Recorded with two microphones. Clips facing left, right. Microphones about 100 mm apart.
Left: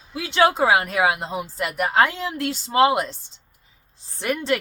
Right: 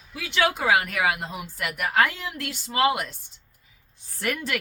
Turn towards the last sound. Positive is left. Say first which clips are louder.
# left 6 dB
turn(degrees=25)  # may be behind; listen again after turning